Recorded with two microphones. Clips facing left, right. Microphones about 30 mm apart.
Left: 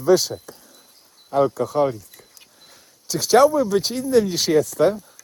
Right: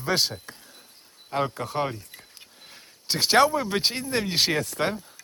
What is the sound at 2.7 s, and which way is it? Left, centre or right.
Speech, right.